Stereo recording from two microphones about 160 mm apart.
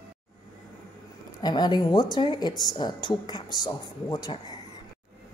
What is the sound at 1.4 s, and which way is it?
Speech, 25° left (ahead or behind).